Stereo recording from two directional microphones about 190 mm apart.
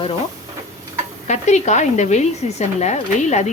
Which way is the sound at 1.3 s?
40° left (ahead or behind).